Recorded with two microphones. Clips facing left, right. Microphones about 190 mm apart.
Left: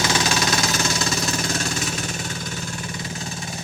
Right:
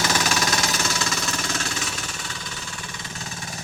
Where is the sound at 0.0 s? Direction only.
25° left (ahead or behind).